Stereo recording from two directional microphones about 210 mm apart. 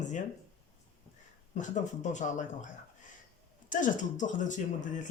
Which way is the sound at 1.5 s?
35° left (ahead or behind).